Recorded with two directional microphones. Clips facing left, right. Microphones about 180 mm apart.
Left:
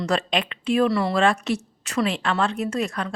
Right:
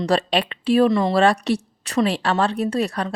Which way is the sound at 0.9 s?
20° right (ahead or behind).